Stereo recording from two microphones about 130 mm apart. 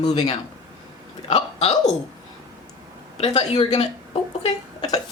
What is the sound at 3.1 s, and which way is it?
A woman's voice, 55° left (ahead or behind).